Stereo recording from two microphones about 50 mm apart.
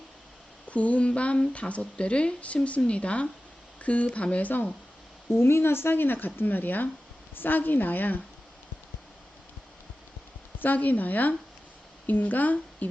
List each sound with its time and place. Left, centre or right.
0.7 s speech: left
5.3 s speech: left
10.6 s speech: left